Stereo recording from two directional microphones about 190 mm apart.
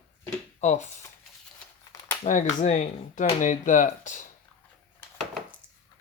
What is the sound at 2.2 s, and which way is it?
Speech, 40° left (ahead or behind).